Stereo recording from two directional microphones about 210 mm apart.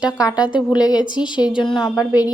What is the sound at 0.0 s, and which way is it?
A woman's voice, 20° left (ahead or behind).